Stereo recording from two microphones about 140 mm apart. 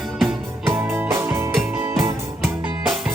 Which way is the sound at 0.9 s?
15° right (ahead or behind).